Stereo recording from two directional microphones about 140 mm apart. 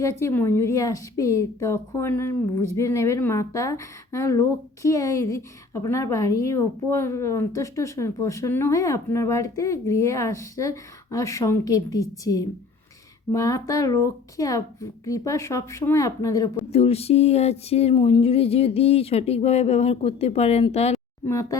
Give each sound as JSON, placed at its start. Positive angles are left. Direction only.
{"t": 0.0, "sound": "a woman's voice", "side_deg": 20}
{"t": 16.7, "sound": "a sound", "side_deg": 45}
{"t": 21.2, "sound": "a woman's voice", "side_deg": 20}